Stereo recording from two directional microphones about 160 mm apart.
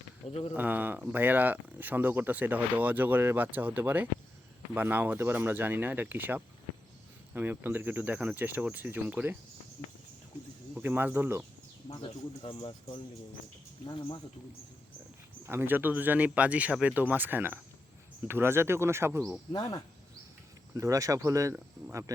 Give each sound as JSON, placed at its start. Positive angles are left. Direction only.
{"t": 0.3, "sound": "speech", "side_deg": 40}
{"t": 0.5, "sound": "speech", "side_deg": -10}
{"t": 10.8, "sound": "speech", "side_deg": -10}
{"t": 11.9, "sound": "speech", "side_deg": 30}
{"t": 15.4, "sound": "speech", "side_deg": -15}
{"t": 19.5, "sound": "speech", "side_deg": 25}
{"t": 20.7, "sound": "speech", "side_deg": -20}